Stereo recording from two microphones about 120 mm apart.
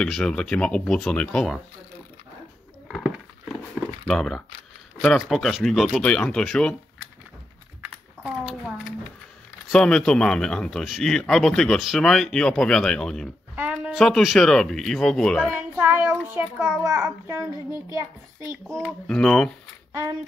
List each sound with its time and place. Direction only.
0.0 s speech: 5° left (ahead or behind)
4.1 s speech: 5° left (ahead or behind)
8.2 s a sound: 5° right (ahead or behind)
9.7 s speech: 5° left (ahead or behind)
13.6 s a sound: 10° right (ahead or behind)
14.0 s speech: centre (ahead or behind)
15.7 s child singing: 15° right (ahead or behind)
16.6 s a child's voice: 25° right (ahead or behind)
18.7 s speech: 5° left (ahead or behind)
19.9 s speech: 30° right (ahead or behind)